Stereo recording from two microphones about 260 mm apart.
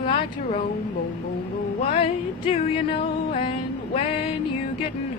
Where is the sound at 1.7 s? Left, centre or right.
Left.